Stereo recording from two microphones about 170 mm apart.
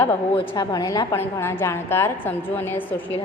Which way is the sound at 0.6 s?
25° left (ahead or behind).